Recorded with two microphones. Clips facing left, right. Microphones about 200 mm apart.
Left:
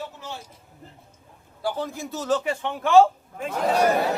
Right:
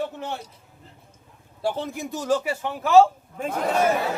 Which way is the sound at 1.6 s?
25° right (ahead or behind).